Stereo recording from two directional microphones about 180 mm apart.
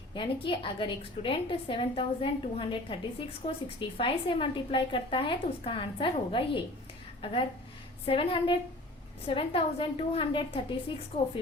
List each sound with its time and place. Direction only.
0.1 s a woman's voice: 30° left (ahead or behind)